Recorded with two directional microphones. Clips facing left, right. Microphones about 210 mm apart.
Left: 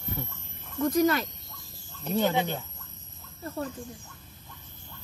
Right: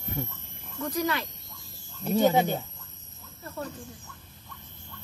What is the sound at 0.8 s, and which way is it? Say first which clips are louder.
Speech: left 6 dB; 45° left (ahead or behind).